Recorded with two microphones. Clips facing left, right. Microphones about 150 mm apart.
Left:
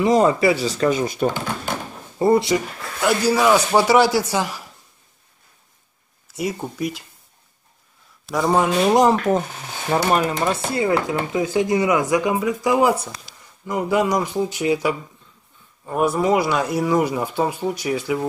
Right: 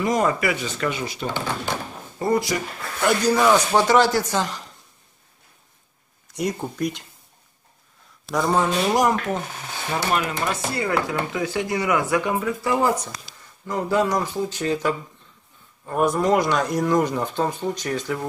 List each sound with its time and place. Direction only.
0.0 s speech: 25° left (ahead or behind); by 1.2 s 45° left (ahead or behind)
2.1 s speech: 25° left (ahead or behind)
3.0 s speech: 5° left (ahead or behind)
6.2 s speech: 5° left (ahead or behind)
8.3 s speech: 10° left (ahead or behind)
9.9 s speech: 40° left (ahead or behind); by 18.2 s 10° left (ahead or behind)